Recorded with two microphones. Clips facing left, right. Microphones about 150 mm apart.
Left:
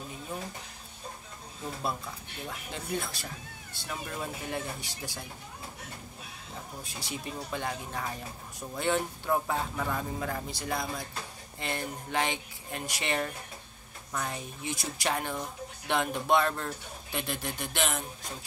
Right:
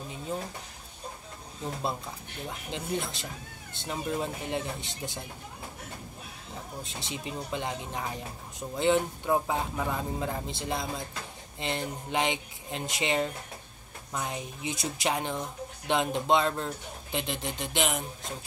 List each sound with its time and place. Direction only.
2.7 s speech: 20° right (ahead or behind)
6.8 s speech: 20° right (ahead or behind)